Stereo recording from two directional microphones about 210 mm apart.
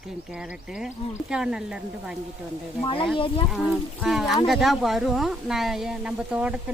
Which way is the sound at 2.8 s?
25° left (ahead or behind).